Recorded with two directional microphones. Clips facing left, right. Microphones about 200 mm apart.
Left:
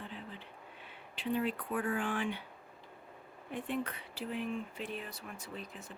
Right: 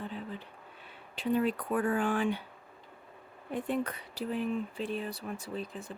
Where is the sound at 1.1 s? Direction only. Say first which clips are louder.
Right 5 dB; 40° right (ahead or behind).